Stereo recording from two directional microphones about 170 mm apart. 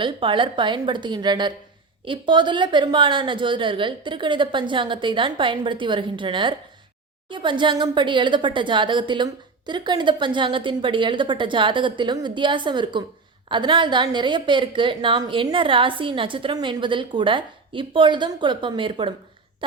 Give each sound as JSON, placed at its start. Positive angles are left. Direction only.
{"t": 0.0, "sound": "speech", "side_deg": -30}